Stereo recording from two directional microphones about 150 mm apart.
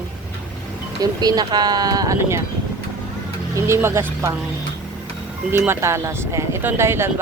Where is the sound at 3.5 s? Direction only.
20° right (ahead or behind).